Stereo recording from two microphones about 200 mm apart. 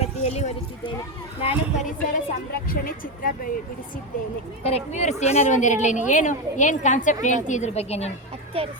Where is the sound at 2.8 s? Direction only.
45° left (ahead or behind).